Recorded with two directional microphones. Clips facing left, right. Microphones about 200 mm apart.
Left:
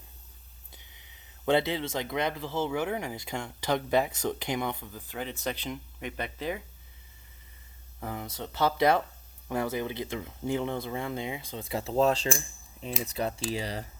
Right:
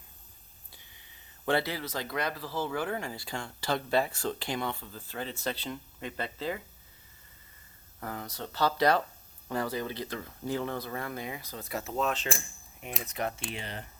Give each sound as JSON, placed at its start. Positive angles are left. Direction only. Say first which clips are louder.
{"t": 1.5, "sound": "speech", "louder": "left 4 dB", "side_deg": 20}
{"t": 7.9, "sound": "speech", "louder": "left 2 dB", "side_deg": 15}
{"t": 13.5, "sound": "speech", "louder": "left 7 dB", "side_deg": 35}